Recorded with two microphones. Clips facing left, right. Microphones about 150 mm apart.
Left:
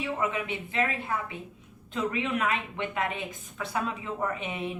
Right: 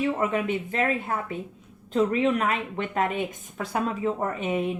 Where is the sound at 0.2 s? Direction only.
45° right (ahead or behind).